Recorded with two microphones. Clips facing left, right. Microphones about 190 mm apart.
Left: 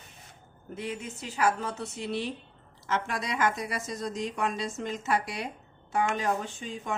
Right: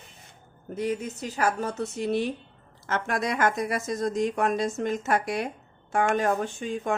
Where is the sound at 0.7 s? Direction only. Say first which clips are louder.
Right 7 dB; 40° right (ahead or behind).